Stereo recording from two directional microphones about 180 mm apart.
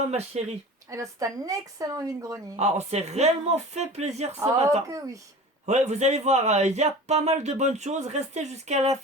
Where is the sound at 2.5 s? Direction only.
40° right (ahead or behind).